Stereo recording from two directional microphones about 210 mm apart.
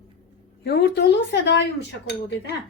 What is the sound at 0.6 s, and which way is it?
Speech, 45° left (ahead or behind).